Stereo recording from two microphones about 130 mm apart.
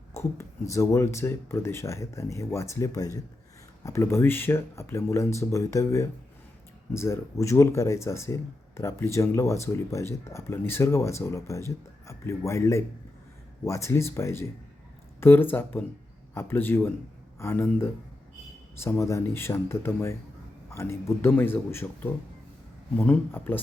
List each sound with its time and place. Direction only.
0.1 s a man's voice: 25° left (ahead or behind)